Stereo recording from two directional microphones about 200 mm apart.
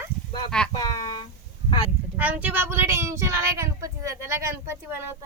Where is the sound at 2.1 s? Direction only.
10° right (ahead or behind).